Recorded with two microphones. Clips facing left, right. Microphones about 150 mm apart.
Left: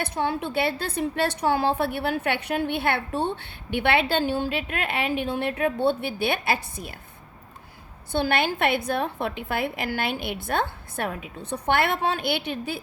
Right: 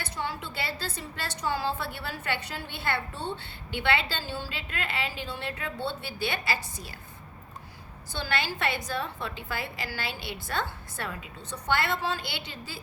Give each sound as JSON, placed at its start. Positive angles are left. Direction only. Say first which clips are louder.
{"t": 0.0, "sound": "a woman's voice", "louder": "left 8 dB", "side_deg": 60}
{"t": 8.1, "sound": "a woman's voice", "louder": "left 8 dB", "side_deg": 55}